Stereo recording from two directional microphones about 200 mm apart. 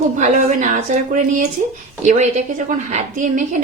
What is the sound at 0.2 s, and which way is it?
A woman's voice, 40° right (ahead or behind).